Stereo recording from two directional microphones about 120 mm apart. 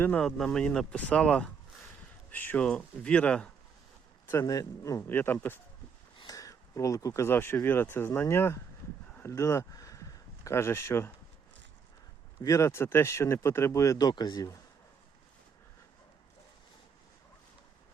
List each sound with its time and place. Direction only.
0.0 s speech: 15° left (ahead or behind)
4.3 s speech: 25° left (ahead or behind)
6.1 s speech: 30° left (ahead or behind)
9.1 s a sound: 20° left (ahead or behind)
12.4 s speech: 25° left (ahead or behind)